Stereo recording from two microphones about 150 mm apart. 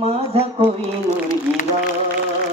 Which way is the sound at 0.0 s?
40° right (ahead or behind).